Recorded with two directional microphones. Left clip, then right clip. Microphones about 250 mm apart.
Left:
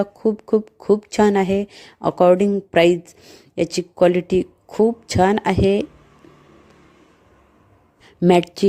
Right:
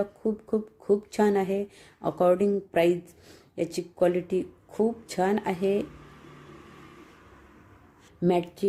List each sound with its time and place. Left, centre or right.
0.0 s speech: left
8.2 s speech: left